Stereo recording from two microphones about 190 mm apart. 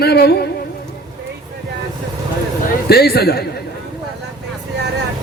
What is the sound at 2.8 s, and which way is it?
Speech, 55° left (ahead or behind).